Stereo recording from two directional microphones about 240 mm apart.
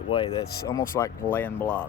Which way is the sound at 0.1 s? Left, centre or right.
Left.